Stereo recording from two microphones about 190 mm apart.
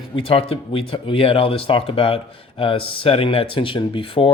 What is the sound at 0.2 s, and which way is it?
Speech, 30° left (ahead or behind).